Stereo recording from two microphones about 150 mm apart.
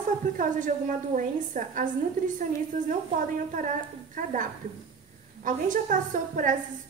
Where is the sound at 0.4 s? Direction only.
60° right (ahead or behind).